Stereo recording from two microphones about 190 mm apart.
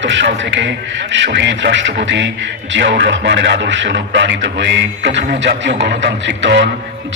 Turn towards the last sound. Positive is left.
turn(degrees=-70)  # may be behind; listen again after turning